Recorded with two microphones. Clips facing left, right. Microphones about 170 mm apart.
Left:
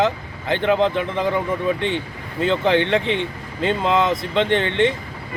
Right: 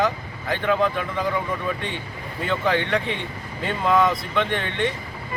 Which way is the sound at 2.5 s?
20° left (ahead or behind).